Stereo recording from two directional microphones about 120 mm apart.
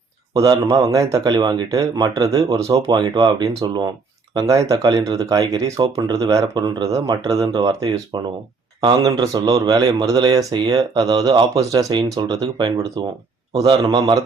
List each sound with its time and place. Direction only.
0.3 s a man's voice: 30° right (ahead or behind)
2.8 s a man's voice: 35° right (ahead or behind)